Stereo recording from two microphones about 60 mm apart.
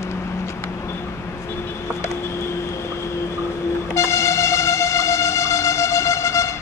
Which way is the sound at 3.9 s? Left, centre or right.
Left.